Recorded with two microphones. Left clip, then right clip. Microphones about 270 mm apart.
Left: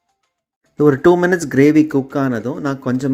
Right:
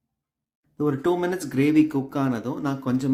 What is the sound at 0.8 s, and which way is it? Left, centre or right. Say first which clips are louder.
Speech: left 11 dB; left.